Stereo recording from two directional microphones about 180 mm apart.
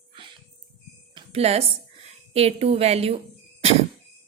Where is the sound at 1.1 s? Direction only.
30° right (ahead or behind).